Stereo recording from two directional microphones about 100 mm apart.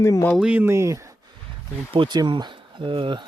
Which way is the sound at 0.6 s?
25° right (ahead or behind).